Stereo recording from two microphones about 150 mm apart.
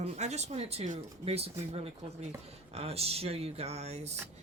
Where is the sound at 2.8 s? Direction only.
40° right (ahead or behind).